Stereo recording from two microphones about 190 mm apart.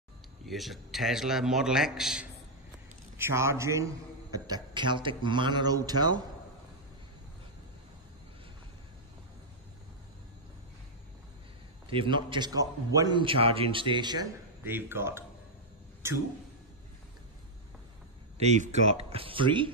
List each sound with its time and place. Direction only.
0.5 s a man's voice: centre (ahead or behind)
3.2 s a man's voice: 15° right (ahead or behind)
11.9 s a man's voice: 25° right (ahead or behind)
14.6 s speech: 10° right (ahead or behind)
18.4 s speech: 35° right (ahead or behind)